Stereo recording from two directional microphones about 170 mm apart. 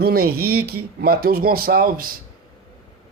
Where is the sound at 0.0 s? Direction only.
65° right (ahead or behind).